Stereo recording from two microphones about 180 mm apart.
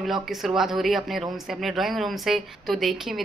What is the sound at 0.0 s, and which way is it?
Speech, centre (ahead or behind).